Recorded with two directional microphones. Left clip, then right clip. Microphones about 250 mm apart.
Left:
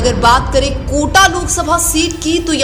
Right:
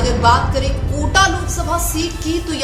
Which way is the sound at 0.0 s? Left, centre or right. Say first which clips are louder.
Left 4 dB; left.